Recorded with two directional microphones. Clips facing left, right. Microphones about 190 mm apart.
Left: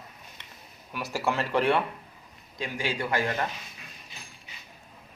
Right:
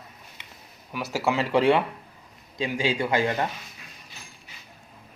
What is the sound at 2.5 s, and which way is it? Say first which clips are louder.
Speech: right 6 dB; 20° right (ahead or behind).